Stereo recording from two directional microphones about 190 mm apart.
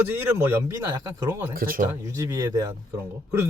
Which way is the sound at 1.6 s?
45° right (ahead or behind).